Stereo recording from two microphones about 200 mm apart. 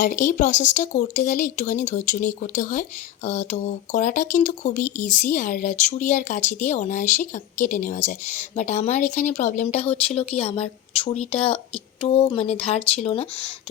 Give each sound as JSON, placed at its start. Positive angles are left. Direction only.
{"t": 0.3, "sound": "a woman's voice", "side_deg": 35}